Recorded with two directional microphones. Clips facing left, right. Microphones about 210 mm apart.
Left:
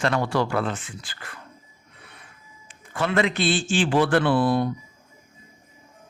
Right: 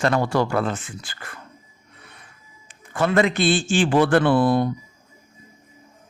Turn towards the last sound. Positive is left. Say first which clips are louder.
# right 3 dB
turn(degrees=-45)  # may be behind; listen again after turning